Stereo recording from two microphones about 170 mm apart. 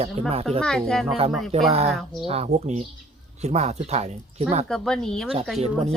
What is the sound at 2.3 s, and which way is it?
Speech, 40° right (ahead or behind).